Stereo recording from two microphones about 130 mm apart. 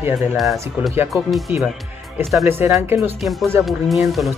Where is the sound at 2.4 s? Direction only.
15° right (ahead or behind).